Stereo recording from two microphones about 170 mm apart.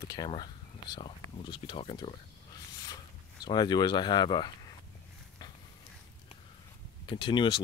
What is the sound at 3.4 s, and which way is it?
Speech, 25° left (ahead or behind).